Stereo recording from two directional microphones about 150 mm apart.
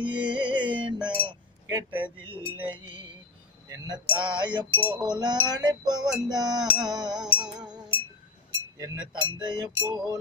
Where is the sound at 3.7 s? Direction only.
25° right (ahead or behind).